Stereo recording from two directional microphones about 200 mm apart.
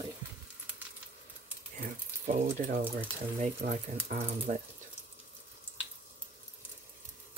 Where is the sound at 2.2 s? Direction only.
40° right (ahead or behind).